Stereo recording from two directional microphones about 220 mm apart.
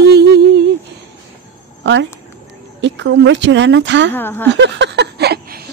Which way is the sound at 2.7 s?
55° right (ahead or behind).